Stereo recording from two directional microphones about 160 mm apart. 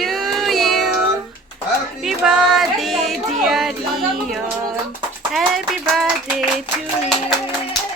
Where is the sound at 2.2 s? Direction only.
5° right (ahead or behind).